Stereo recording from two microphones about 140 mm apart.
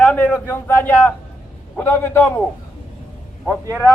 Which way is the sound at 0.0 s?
10° left (ahead or behind).